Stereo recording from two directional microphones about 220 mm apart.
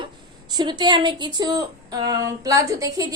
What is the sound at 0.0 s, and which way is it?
Speech, 20° right (ahead or behind).